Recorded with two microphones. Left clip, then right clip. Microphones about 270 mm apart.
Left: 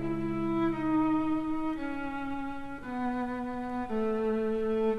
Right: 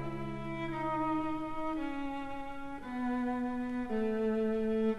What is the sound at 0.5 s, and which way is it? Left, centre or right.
Music, right.